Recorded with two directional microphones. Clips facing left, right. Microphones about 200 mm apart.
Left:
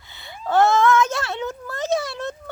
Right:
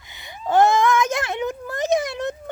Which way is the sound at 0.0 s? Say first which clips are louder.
Right 1 dB; 15° right (ahead or behind).